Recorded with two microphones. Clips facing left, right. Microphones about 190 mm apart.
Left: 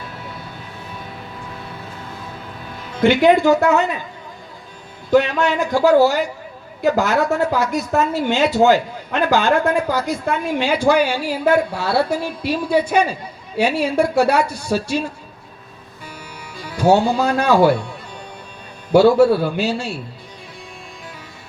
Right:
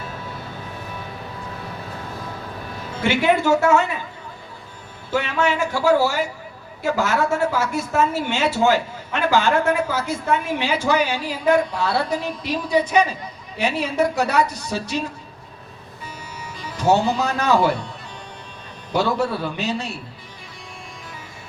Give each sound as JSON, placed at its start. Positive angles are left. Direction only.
{"t": 3.0, "sound": "a woman's voice", "side_deg": 15}
{"t": 5.1, "sound": "a woman's voice", "side_deg": 15}
{"t": 16.6, "sound": "speech", "side_deg": 10}
{"t": 18.9, "sound": "a woman's voice", "side_deg": 10}